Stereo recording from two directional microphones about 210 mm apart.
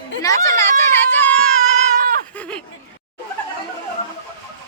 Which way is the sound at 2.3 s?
5° left (ahead or behind).